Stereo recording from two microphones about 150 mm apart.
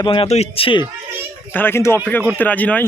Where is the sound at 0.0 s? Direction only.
35° left (ahead or behind).